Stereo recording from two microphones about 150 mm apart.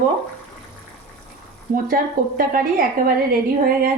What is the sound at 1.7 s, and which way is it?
A woman's voice, 70° right (ahead or behind).